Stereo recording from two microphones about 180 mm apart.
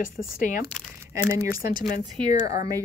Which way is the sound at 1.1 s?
15° right (ahead or behind).